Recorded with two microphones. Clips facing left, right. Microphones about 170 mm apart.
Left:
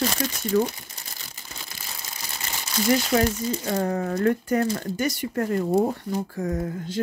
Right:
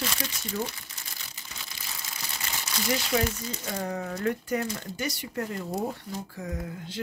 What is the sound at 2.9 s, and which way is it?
Speech, 45° left (ahead or behind).